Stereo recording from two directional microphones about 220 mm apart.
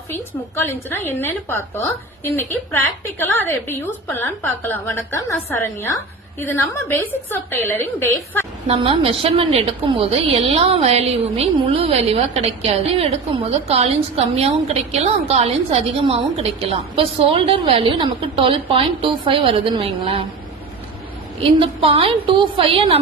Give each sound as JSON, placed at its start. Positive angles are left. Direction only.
{"t": 0.1, "sound": "a woman's voice", "side_deg": 10}
{"t": 8.6, "sound": "a woman's voice", "side_deg": -25}
{"t": 21.6, "sound": "a woman's voice", "side_deg": -25}